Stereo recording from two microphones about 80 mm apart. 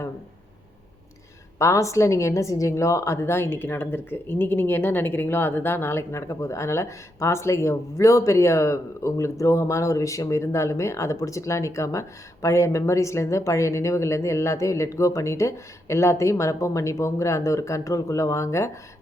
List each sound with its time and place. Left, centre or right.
1.5 s a woman's voice: left